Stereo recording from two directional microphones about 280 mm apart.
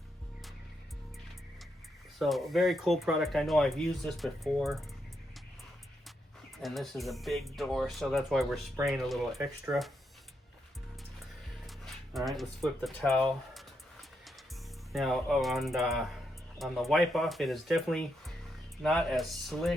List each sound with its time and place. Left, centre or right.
2.1 s speech: centre
6.6 s speech: centre
12.1 s speech: centre
14.9 s speech: centre